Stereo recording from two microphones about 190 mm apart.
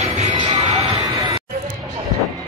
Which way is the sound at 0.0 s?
30° right (ahead or behind).